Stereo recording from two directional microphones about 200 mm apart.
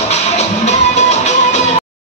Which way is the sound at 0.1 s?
35° left (ahead or behind).